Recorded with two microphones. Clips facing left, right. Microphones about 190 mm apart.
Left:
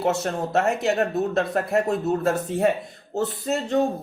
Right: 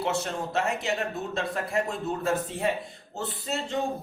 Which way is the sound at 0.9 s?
40° left (ahead or behind).